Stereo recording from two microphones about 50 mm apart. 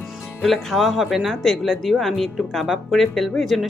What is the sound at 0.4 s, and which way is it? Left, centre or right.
Speech, centre.